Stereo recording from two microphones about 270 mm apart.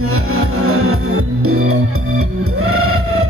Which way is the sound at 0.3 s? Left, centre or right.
Right.